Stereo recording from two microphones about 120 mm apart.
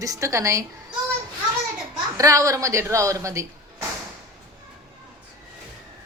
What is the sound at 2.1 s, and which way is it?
Speech, 25° right (ahead or behind).